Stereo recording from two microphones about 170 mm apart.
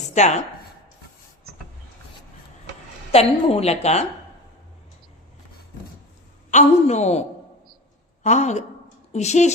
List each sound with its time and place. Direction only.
0.1 s speech: 45° left (ahead or behind)
3.1 s a woman's voice: 35° left (ahead or behind)
6.5 s a woman's voice: 45° left (ahead or behind)
8.2 s a woman's voice: 45° left (ahead or behind)